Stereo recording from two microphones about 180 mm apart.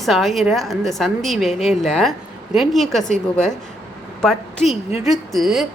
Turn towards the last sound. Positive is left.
turn(degrees=0)  # may be behind; listen again after turning